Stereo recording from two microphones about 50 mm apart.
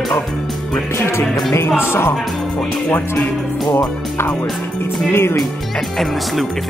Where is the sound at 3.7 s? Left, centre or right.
Left.